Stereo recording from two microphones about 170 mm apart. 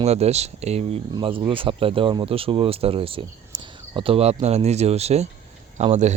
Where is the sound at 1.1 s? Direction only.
30° right (ahead or behind).